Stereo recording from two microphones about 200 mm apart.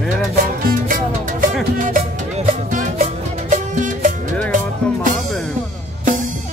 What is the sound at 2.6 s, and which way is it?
Music, 35° right (ahead or behind).